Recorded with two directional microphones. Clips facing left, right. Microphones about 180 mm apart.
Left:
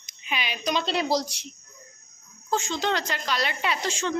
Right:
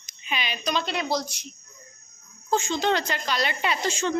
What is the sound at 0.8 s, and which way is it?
Speech, 30° left (ahead or behind).